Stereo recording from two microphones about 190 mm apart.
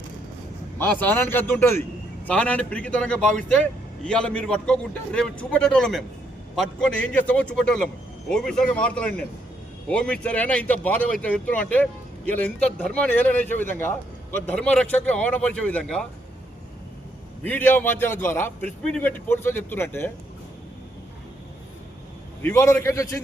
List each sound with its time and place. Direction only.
0.8 s a man's voice: 10° left (ahead or behind)
17.4 s speech: 10° left (ahead or behind)
22.4 s speech: 15° left (ahead or behind)